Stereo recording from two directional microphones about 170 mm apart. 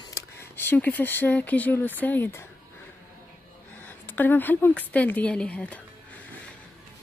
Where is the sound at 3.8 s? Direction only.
10° left (ahead or behind).